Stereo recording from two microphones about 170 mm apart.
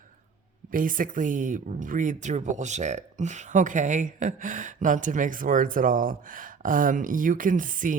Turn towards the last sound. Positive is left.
turn(degrees=-50)  # may be behind; listen again after turning